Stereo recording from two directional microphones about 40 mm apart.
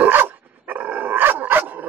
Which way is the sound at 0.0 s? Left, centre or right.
Right.